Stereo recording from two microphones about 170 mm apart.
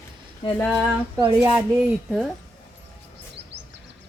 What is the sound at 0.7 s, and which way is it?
Speech, 10° right (ahead or behind).